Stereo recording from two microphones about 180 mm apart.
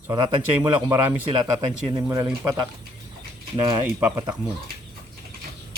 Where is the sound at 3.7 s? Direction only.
15° right (ahead or behind).